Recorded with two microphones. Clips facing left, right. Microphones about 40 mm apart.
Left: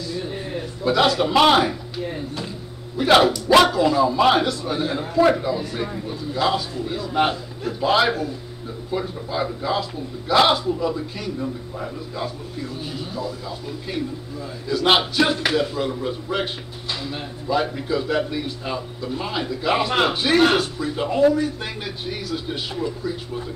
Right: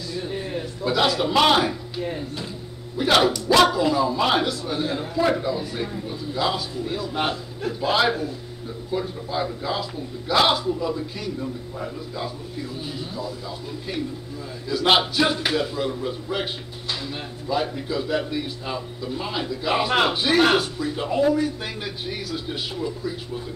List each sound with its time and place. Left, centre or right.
0.8 s a man's voice: centre
3.0 s a man's voice: centre
14.7 s a man's voice: centre